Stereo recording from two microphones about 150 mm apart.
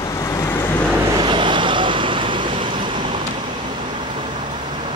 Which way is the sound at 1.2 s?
30° right (ahead or behind).